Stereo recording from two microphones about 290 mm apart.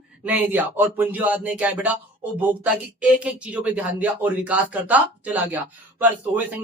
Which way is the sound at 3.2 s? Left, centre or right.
Centre.